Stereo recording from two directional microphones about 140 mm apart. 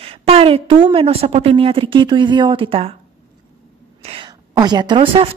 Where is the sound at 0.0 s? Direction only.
45° right (ahead or behind).